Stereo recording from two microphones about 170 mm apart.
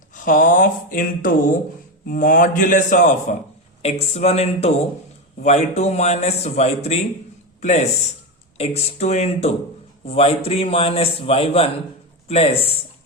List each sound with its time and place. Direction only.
0.1 s speech: 50° left (ahead or behind)
3.8 s a man's voice: 40° left (ahead or behind)